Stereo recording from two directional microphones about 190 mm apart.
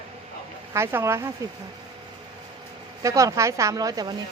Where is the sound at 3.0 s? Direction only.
15° right (ahead or behind).